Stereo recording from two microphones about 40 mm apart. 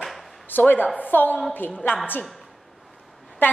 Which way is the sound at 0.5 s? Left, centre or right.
Left.